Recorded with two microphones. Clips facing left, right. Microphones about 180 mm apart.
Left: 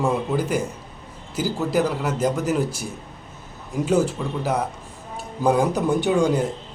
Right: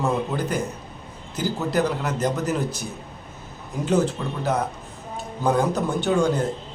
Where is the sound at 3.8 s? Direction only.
10° left (ahead or behind).